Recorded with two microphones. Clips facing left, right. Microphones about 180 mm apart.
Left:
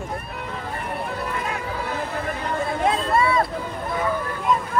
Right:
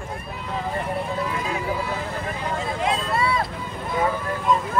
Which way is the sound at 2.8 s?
50° left (ahead or behind).